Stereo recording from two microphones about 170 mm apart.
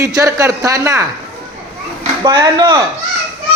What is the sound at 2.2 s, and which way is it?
Speech, 25° right (ahead or behind).